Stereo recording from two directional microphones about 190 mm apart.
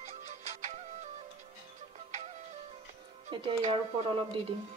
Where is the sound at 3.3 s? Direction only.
30° right (ahead or behind).